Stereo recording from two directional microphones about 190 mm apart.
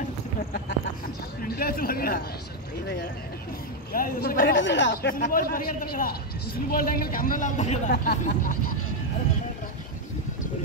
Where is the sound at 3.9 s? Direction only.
50° left (ahead or behind); by 4.9 s 70° left (ahead or behind).